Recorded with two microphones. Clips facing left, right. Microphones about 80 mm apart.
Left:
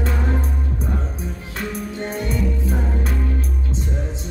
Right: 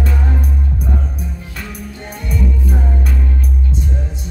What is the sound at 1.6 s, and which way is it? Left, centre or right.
Music, left.